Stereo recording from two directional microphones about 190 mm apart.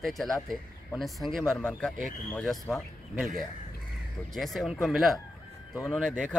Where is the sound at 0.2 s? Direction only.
Centre (ahead or behind).